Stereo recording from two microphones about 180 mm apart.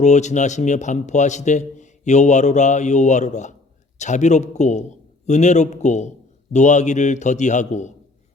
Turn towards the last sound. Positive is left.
turn(degrees=40)  # may be behind; listen again after turning